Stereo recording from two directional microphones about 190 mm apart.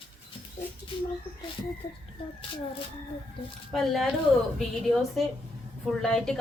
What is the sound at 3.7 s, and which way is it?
Speech, centre (ahead or behind).